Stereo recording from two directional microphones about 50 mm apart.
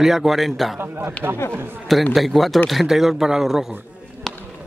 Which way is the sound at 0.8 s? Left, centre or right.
Right.